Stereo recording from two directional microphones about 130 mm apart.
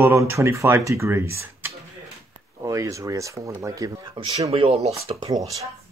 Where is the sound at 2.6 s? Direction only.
25° right (ahead or behind).